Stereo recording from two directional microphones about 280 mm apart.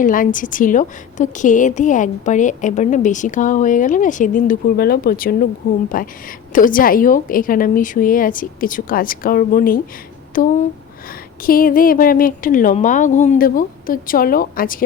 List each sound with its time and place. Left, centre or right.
0.0 s a woman's voice: left